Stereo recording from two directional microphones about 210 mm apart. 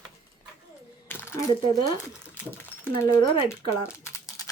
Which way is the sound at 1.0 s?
10° left (ahead or behind).